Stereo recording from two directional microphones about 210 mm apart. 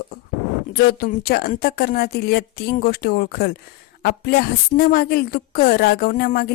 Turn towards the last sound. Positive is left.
turn(degrees=45)  # may be behind; listen again after turning